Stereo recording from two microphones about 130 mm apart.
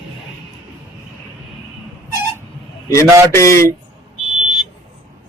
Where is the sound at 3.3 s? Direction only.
25° left (ahead or behind).